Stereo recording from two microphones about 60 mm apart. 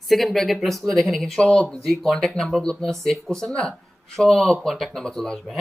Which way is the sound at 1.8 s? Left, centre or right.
Centre.